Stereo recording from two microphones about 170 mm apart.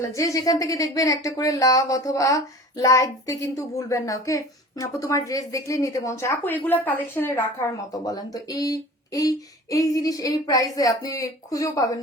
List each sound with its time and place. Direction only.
0.1 s speech: 20° left (ahead or behind)